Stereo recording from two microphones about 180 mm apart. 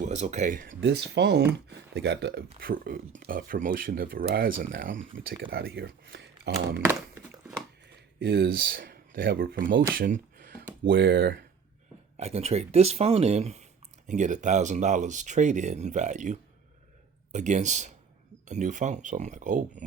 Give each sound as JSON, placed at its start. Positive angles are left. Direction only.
{"t": 0.0, "sound": "speech", "side_deg": -40}
{"t": 0.7, "sound": "speech", "side_deg": -80}
{"t": 2.6, "sound": "speech", "side_deg": -55}
{"t": 7.9, "sound": "speech", "side_deg": -65}
{"t": 9.9, "sound": "a sound", "side_deg": -50}
{"t": 10.8, "sound": "speech", "side_deg": -80}
{"t": 12.1, "sound": "speech", "side_deg": -35}